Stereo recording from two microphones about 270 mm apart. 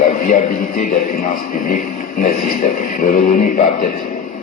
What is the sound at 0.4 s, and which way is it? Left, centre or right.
Music, left.